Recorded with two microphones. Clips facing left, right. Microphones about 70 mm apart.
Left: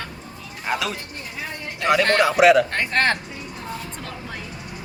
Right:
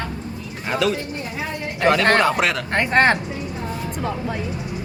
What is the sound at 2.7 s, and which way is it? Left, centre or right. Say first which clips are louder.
Speech: right 5 dB; right.